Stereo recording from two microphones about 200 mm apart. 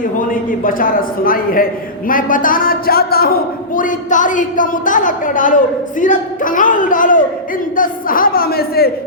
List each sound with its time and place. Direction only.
0.3 s a man's voice: 45° left (ahead or behind)